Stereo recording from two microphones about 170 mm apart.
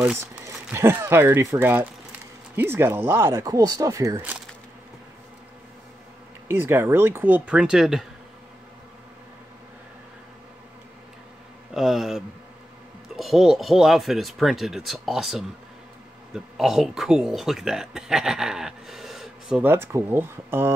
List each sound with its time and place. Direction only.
0.0 s speech: 15° right (ahead or behind)
6.4 s speech: 15° right (ahead or behind)
11.7 s speech: 5° right (ahead or behind)
19.6 s speech: 15° right (ahead or behind)